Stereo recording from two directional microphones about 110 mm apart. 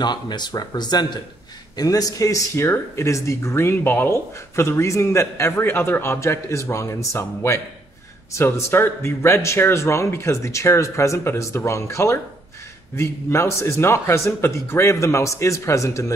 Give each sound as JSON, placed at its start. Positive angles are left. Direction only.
{"t": 0.0, "sound": "speech", "side_deg": 40}